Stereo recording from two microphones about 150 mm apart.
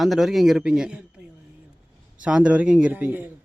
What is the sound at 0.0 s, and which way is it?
Speech, centre (ahead or behind).